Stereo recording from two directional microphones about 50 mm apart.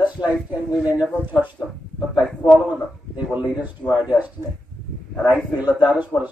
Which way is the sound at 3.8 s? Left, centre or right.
Left.